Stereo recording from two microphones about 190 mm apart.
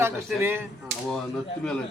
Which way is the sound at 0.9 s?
70° right (ahead or behind).